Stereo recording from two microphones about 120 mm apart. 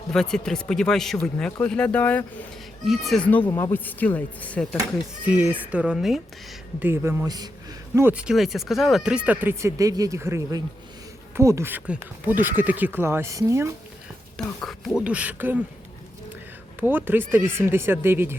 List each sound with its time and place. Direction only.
0.1 s speech: 5° left (ahead or behind)
2.8 s speech: centre (ahead or behind)
3.2 s speech: 15° left (ahead or behind)
5.2 s speech: 15° right (ahead or behind)
6.7 s speech: 15° right (ahead or behind)
7.3 s a man's voice: 35° right (ahead or behind)
7.9 s speech: 15° right (ahead or behind)
14.3 s speech: 5° left (ahead or behind)
15.0 s speech: 10° right (ahead or behind)
16.8 s speech: 15° right (ahead or behind)